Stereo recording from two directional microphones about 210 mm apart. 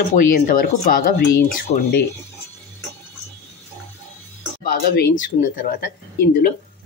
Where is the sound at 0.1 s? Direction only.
40° left (ahead or behind).